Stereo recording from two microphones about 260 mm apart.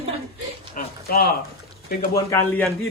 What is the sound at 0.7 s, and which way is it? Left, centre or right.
Speech, left.